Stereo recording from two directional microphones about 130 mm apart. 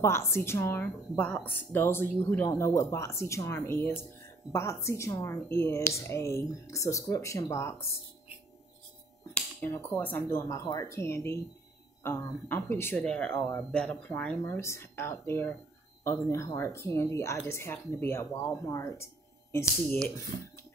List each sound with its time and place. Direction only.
0.0 s a woman's voice: 20° left (ahead or behind)
9.3 s a woman's voice: 15° left (ahead or behind)
12.9 s speech: 10° left (ahead or behind)
14.4 s a woman's voice: 20° left (ahead or behind)